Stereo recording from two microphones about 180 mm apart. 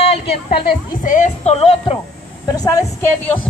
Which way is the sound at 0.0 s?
35° left (ahead or behind).